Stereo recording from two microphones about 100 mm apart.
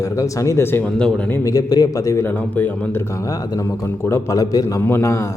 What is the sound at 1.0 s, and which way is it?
Speech, 10° left (ahead or behind).